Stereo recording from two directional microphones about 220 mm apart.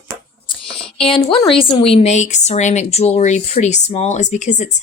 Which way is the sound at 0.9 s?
25° left (ahead or behind).